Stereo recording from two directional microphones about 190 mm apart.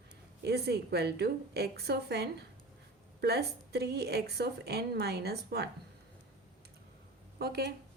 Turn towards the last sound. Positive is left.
turn(degrees=-55)  # may be behind; listen again after turning